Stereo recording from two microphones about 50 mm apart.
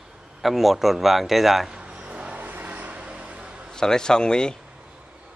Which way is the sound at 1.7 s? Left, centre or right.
Right.